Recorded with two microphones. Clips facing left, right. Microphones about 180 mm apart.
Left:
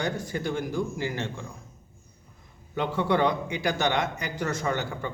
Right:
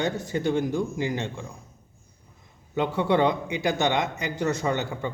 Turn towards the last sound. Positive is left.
turn(degrees=-20)  # may be behind; listen again after turning